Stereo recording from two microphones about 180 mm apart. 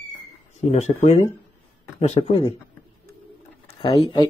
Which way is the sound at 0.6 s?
35° left (ahead or behind).